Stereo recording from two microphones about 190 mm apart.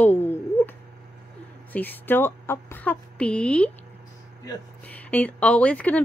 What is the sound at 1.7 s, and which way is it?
Speech, 10° left (ahead or behind).